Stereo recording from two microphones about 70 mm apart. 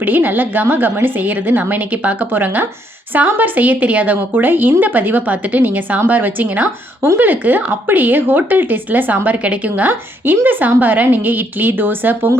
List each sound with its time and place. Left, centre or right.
0.0 s a woman's voice: right